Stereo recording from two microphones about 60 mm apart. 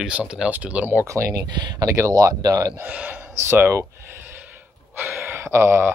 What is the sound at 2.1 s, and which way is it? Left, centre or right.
Speech, right.